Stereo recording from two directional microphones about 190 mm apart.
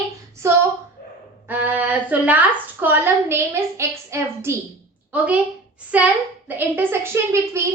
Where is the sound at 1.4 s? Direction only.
10° right (ahead or behind).